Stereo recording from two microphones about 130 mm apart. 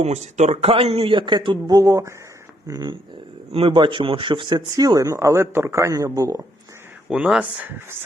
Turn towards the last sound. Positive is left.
turn(degrees=-15)  # may be behind; listen again after turning